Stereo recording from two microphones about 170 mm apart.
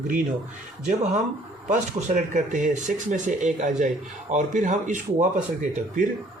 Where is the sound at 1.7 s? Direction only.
45° right (ahead or behind).